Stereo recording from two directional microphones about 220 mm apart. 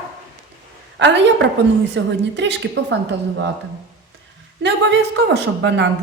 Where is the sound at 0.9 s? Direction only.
55° right (ahead or behind).